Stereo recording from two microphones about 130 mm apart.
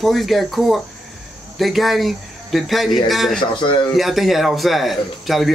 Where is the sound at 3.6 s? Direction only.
40° left (ahead or behind).